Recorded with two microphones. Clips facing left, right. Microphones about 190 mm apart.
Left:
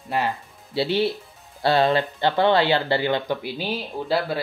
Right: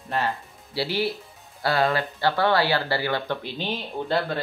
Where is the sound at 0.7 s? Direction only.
20° left (ahead or behind).